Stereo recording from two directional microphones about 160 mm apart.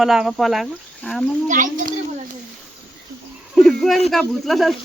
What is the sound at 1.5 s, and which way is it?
Speech, 55° right (ahead or behind).